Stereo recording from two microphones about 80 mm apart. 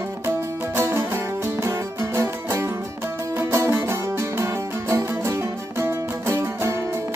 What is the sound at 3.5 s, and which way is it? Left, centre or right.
Music, right.